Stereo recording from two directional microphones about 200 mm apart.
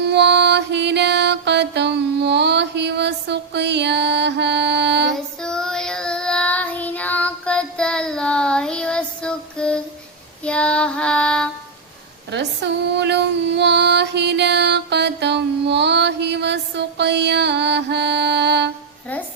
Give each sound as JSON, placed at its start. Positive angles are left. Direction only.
{"t": 0.0, "sound": "mantra", "side_deg": -60}
{"t": 5.1, "sound": "child singing", "side_deg": 5}
{"t": 12.3, "sound": "a sound", "side_deg": -60}